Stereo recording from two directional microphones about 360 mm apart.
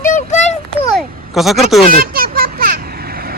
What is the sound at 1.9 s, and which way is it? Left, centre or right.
Vehicle, right.